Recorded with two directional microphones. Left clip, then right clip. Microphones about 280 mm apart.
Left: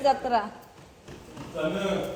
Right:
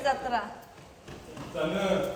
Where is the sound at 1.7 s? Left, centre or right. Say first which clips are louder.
Right 3 dB; centre.